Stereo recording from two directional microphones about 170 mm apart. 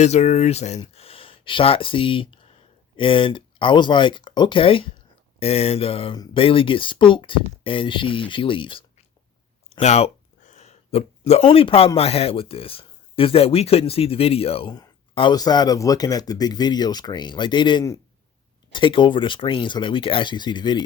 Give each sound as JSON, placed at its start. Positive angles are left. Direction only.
{"t": 0.0, "sound": "speech", "side_deg": 40}
{"t": 9.6, "sound": "a sound", "side_deg": 40}
{"t": 11.9, "sound": "speech", "side_deg": 35}